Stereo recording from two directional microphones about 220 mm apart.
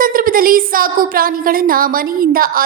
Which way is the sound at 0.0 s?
40° right (ahead or behind).